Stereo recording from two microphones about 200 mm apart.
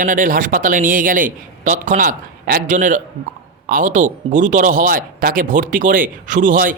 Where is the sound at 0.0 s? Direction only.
45° right (ahead or behind).